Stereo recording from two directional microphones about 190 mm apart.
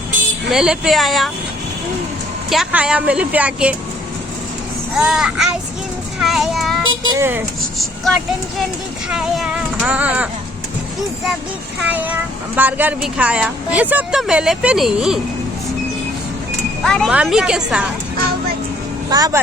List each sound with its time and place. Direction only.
0.5 s speech: 5° right (ahead or behind)
2.5 s a woman's voice: 5° right (ahead or behind)
4.9 s speech: 5° right (ahead or behind)
6.1 s child singing: centre (ahead or behind)
7.1 s a woman's voice: 10° right (ahead or behind)
7.8 s speech: centre (ahead or behind)
11.8 s a woman's voice: 10° right (ahead or behind)
16.8 s speech: 5° left (ahead or behind)
19.1 s speech: 20° right (ahead or behind)